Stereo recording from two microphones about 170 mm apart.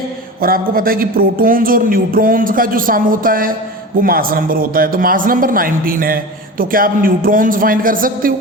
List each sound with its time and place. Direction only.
0.4 s speech: 60° right (ahead or behind)